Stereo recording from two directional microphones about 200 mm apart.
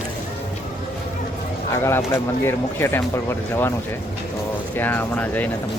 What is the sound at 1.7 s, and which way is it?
Speech, 15° left (ahead or behind).